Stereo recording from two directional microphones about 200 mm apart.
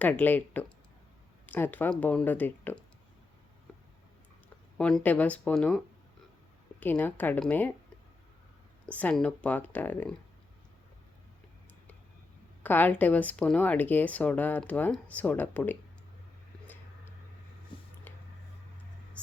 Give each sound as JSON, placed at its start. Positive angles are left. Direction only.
{"t": 0.0, "sound": "speech", "side_deg": 10}
{"t": 4.8, "sound": "speech", "side_deg": 5}
{"t": 8.9, "sound": "speech", "side_deg": 5}
{"t": 12.6, "sound": "speech", "side_deg": 10}
{"t": 17.7, "sound": "a sound", "side_deg": 25}
{"t": 18.1, "sound": "a sound", "side_deg": 10}